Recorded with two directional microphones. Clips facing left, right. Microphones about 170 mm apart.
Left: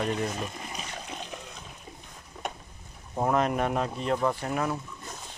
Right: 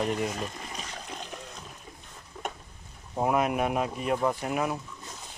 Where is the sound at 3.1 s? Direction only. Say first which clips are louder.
Even; 10° right (ahead or behind).